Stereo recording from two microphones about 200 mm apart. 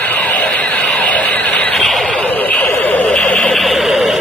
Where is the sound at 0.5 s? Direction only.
5° left (ahead or behind).